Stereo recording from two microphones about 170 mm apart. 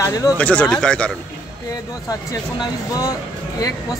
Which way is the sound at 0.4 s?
10° left (ahead or behind).